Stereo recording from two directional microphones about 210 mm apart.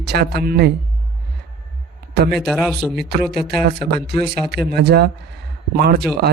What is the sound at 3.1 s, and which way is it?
Speech, 50° right (ahead or behind).